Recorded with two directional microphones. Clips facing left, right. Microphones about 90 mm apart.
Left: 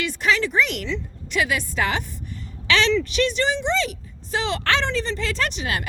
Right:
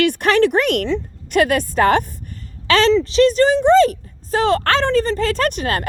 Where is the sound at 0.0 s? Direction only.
60° right (ahead or behind).